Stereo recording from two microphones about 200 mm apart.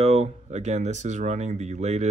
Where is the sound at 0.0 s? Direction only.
30° right (ahead or behind).